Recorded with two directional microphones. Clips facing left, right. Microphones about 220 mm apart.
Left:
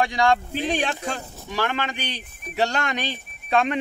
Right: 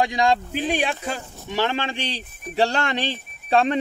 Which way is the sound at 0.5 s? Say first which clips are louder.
Right 1 dB; 10° right (ahead or behind).